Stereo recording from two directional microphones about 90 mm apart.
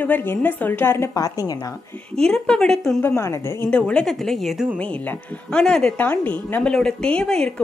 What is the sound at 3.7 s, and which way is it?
Speech, 10° left (ahead or behind).